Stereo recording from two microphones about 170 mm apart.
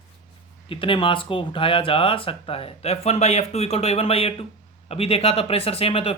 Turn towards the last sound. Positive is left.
turn(degrees=35)  # may be behind; listen again after turning